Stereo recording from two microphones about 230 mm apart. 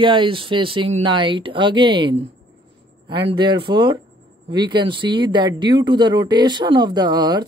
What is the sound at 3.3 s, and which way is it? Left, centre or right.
Speech, right.